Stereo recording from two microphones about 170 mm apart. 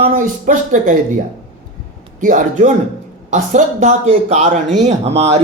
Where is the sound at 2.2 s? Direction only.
50° right (ahead or behind).